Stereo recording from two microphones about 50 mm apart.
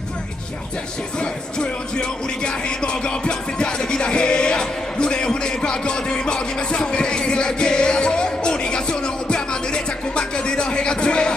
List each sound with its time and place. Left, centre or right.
1.2 s music: centre